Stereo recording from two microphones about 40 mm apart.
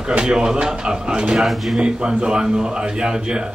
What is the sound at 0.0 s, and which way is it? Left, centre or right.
Speech, right.